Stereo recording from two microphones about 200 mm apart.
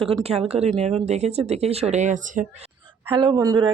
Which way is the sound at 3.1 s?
25° right (ahead or behind).